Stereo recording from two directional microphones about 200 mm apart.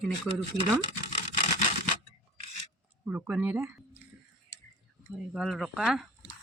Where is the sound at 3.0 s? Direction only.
5° right (ahead or behind).